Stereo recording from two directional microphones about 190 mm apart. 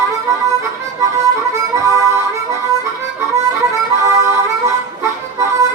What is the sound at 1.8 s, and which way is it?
Harmonica, 15° right (ahead or behind).